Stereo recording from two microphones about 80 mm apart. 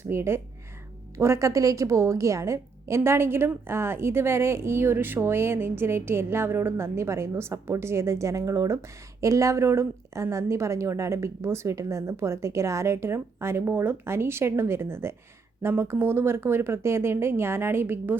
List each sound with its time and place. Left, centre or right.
0.0 s a woman's voice: right